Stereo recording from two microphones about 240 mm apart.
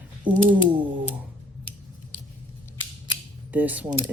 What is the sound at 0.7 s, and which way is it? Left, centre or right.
Typewriter, centre.